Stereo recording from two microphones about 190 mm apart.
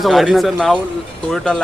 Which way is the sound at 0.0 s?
Centre (ahead or behind).